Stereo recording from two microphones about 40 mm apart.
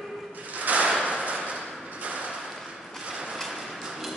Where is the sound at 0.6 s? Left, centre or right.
Right.